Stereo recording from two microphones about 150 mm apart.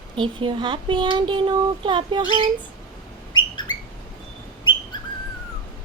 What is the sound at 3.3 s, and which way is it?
Bird, 30° left (ahead or behind).